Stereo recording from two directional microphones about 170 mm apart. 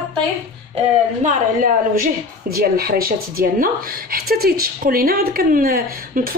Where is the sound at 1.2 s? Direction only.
55° right (ahead or behind).